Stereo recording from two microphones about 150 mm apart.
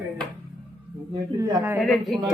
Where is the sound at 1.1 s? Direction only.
20° right (ahead or behind).